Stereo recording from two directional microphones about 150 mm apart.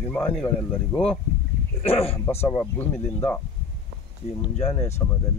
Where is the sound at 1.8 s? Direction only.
40° left (ahead or behind).